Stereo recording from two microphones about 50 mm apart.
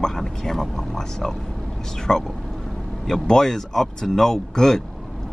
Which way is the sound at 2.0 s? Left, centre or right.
Centre.